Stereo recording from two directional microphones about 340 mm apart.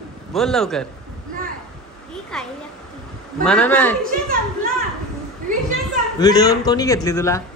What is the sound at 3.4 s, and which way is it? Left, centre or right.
Speech, centre.